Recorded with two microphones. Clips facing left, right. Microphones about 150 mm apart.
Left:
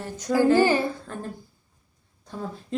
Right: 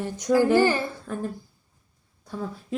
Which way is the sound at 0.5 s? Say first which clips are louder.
Left 1 dB; 15° left (ahead or behind).